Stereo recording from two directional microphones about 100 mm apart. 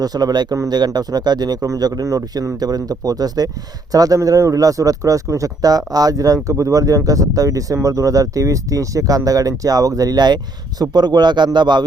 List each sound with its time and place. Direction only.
0.0 s speech: 40° right (ahead or behind)